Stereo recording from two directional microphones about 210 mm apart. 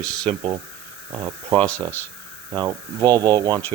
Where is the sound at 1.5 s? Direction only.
5° left (ahead or behind).